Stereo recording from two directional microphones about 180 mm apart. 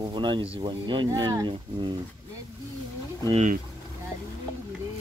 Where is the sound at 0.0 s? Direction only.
25° right (ahead or behind).